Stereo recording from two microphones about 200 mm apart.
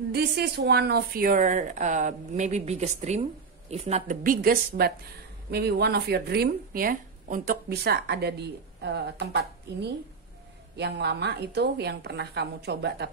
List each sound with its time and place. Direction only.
0.1 s a woman's voice: 55° right (ahead or behind)